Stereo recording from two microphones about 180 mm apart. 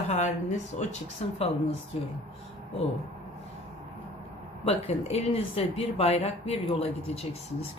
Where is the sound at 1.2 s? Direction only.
35° left (ahead or behind).